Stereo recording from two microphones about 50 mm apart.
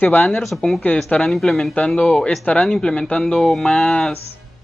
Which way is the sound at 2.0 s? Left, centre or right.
Centre.